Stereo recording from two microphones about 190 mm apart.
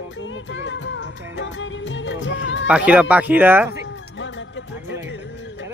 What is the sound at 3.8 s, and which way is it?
Music, 75° left (ahead or behind).